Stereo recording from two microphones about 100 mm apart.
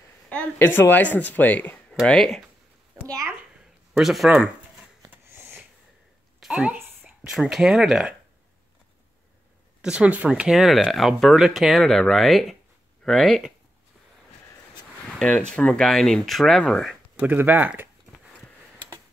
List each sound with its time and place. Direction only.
0.3 s speech: 20° left (ahead or behind)
2.0 s a child's voice: 5° left (ahead or behind)
5.1 s a sound: 20° right (ahead or behind)
6.4 s a woman's voice: 10° right (ahead or behind)
9.8 s speech: 10° right (ahead or behind)
15.1 s speech: 10° left (ahead or behind)
17.2 s speech: 15° right (ahead or behind)